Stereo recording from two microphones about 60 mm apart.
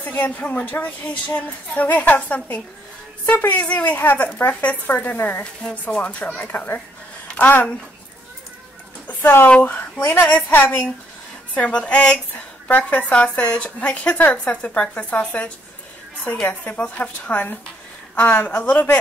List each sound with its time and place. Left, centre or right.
0.0 s speech: left
5.4 s speech: centre
7.2 s a sound: left
9.0 s speech: left